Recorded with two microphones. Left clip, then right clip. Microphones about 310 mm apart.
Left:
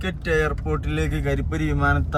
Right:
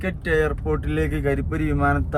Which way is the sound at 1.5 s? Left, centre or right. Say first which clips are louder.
Right 1 dB; right.